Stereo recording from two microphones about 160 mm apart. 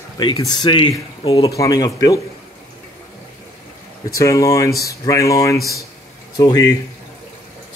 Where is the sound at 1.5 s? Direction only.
20° left (ahead or behind).